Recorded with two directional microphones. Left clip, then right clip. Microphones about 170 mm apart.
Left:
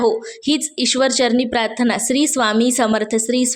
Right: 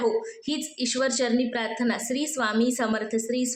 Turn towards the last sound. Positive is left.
turn(degrees=50)  # may be behind; listen again after turning